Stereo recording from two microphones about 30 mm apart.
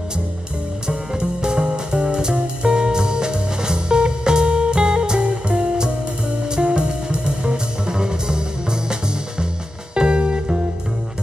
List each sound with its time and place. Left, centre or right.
1.4 s music: right
9.9 s music: right